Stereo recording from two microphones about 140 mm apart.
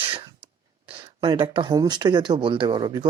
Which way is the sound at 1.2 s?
35° right (ahead or behind).